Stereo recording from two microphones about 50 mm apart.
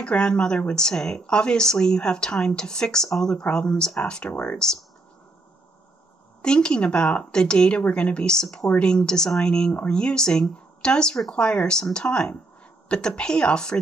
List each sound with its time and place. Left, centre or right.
0.0 s speech: centre
6.4 s speech: centre